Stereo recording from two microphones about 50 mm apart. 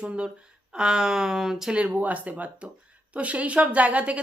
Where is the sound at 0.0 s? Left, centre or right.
Centre.